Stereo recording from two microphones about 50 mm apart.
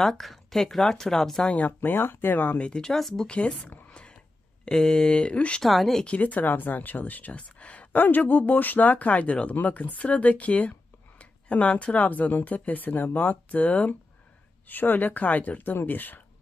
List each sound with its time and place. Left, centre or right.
0.2 s speech: centre
1.4 s speech: left
1.7 s speech: left
2.6 s speech: centre
3.3 s speech: left
4.6 s speech: centre
5.6 s speech: centre
6.0 s speech: left
7.9 s speech: left